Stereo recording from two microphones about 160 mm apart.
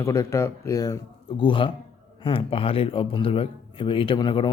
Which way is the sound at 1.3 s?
30° left (ahead or behind).